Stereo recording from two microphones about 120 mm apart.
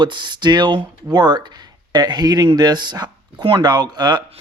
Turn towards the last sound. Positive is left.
turn(degrees=-35)  # may be behind; listen again after turning